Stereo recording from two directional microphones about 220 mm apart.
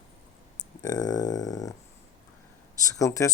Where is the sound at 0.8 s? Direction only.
15° left (ahead or behind).